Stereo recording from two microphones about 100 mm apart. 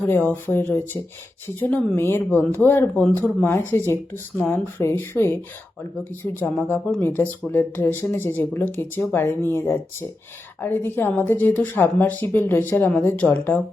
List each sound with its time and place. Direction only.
0.3 s speech: 20° left (ahead or behind)